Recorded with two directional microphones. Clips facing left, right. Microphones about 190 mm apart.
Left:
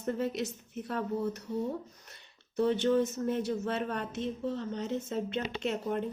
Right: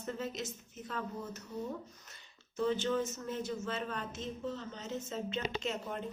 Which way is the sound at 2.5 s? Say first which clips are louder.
Left 6 dB; 65° left (ahead or behind).